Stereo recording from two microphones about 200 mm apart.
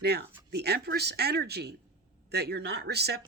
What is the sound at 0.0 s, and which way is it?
Speech, 55° right (ahead or behind).